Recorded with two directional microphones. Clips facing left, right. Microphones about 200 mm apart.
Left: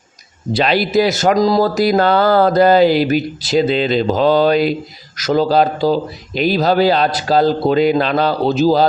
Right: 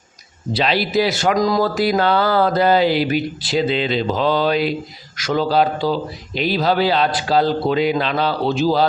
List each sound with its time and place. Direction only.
0.5 s speech: 50° left (ahead or behind)